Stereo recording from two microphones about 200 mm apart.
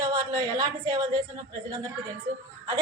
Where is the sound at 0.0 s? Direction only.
20° right (ahead or behind).